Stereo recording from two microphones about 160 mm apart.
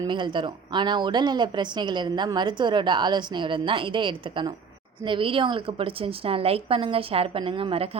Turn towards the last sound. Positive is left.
turn(degrees=-35)  # may be behind; listen again after turning